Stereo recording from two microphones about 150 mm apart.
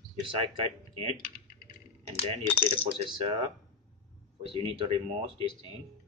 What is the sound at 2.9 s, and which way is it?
Speech, 40° right (ahead or behind).